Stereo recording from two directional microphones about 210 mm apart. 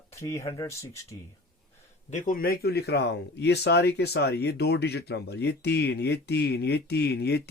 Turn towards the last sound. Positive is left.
turn(degrees=50)  # may be behind; listen again after turning